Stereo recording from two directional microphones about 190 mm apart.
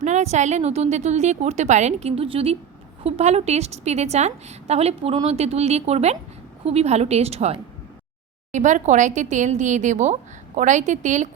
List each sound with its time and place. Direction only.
0.0 s a woman's voice: 35° right (ahead or behind)